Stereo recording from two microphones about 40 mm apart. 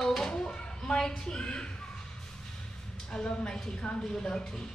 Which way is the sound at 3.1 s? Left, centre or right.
Centre.